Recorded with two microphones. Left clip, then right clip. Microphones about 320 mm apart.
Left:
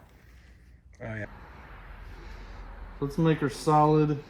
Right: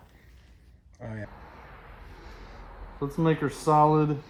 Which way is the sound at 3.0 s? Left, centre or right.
Centre.